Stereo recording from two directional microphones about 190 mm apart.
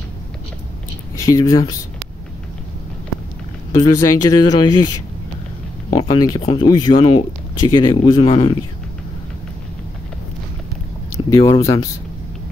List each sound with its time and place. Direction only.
1.1 s speech: 15° left (ahead or behind)
3.7 s speech: 20° left (ahead or behind)
5.9 s speech: 25° left (ahead or behind)
11.3 s speech: 15° left (ahead or behind)